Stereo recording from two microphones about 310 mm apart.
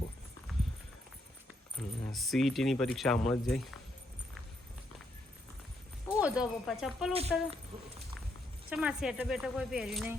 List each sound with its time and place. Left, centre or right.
1.7 s speech: centre
6.1 s speech: centre
7.1 s speech: centre
8.7 s speech: centre